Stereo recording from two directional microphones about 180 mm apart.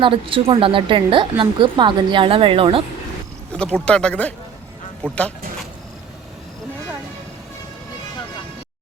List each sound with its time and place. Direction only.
0.0 s speech: 30° right (ahead or behind)
3.5 s a sound: 5° left (ahead or behind)
3.8 s speech: 5° left (ahead or behind)